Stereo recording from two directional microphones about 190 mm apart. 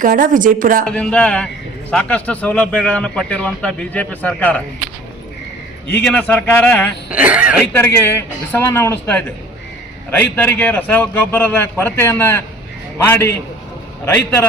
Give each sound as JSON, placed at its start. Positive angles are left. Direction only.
{"t": 0.0, "sound": "speech", "side_deg": -45}
{"t": 0.9, "sound": "a man's voice", "side_deg": 5}
{"t": 6.1, "sound": "a man's voice", "side_deg": 5}
{"t": 7.1, "sound": "speech", "side_deg": -5}
{"t": 7.7, "sound": "a man's voice", "side_deg": 10}